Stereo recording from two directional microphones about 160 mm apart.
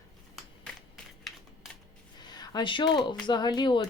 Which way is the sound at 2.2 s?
25° left (ahead or behind).